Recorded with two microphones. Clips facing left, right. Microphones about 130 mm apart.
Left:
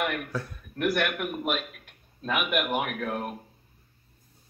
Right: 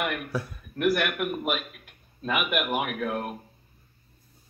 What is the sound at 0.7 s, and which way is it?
A man's voice, centre (ahead or behind).